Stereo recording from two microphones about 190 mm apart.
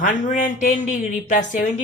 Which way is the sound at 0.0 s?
45° left (ahead or behind).